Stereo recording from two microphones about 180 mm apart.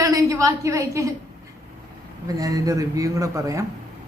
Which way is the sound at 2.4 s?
20° right (ahead or behind).